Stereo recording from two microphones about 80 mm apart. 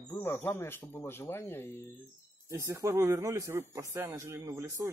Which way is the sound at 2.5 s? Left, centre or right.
Right.